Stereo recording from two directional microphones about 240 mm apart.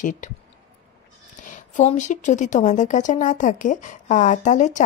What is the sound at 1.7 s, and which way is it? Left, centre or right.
Speech, left.